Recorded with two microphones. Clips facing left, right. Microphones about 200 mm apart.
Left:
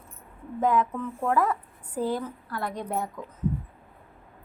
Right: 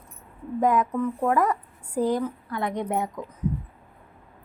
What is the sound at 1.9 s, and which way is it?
A woman's voice, 15° right (ahead or behind).